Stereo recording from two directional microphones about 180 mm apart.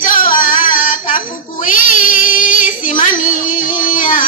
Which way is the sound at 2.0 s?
50° left (ahead or behind).